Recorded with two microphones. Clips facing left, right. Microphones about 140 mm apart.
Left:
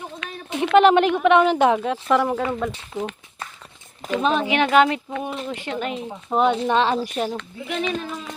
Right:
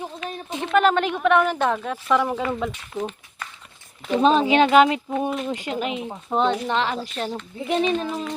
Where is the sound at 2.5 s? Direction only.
Centre (ahead or behind).